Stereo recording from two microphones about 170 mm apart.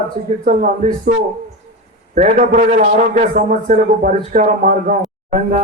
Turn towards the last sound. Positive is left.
turn(degrees=-45)  # may be behind; listen again after turning